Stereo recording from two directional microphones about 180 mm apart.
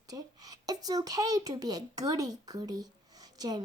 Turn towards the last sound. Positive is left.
turn(degrees=-20)  # may be behind; listen again after turning